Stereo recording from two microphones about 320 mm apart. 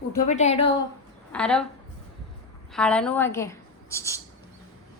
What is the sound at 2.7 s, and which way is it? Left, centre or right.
A woman's voice, centre.